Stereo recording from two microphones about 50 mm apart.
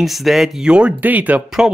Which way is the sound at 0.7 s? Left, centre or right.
Right.